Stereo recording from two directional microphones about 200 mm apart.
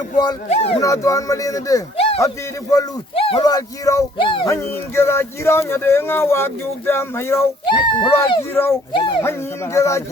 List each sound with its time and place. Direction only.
0.4 s speech: 30° left (ahead or behind)
0.8 s speech: 15° left (ahead or behind)
2.0 s a sound: 30° left (ahead or behind)
2.2 s speech: 15° left (ahead or behind)
4.5 s speech: 15° left (ahead or behind)
7.7 s speech: 25° left (ahead or behind)
8.9 s speech: 25° left (ahead or behind)